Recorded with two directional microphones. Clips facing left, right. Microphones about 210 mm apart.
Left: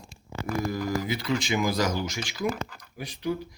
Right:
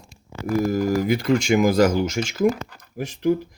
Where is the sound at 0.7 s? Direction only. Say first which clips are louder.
Right 8 dB; 45° right (ahead or behind).